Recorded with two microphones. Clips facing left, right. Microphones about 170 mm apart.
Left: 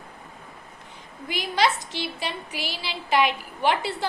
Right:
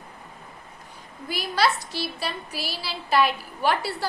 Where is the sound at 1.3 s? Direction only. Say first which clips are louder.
Even; 15° left (ahead or behind).